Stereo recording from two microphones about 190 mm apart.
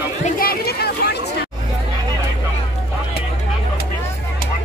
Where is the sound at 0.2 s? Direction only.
50° left (ahead or behind).